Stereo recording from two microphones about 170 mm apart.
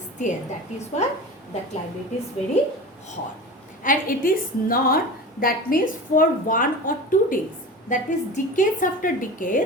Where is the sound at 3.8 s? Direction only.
55° left (ahead or behind).